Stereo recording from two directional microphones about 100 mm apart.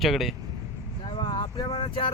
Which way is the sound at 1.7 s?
65° left (ahead or behind).